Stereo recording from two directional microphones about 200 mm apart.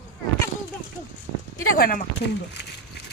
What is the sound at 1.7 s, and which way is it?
Speech, 45° left (ahead or behind).